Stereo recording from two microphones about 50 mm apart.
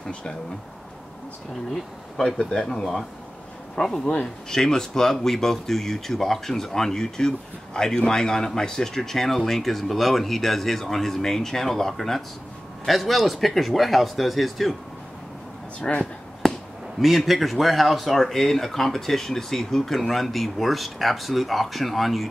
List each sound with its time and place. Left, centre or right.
1.7 s speech: centre
15.8 s speech: centre
16.4 s basketball bounce: centre
17.0 s speech: centre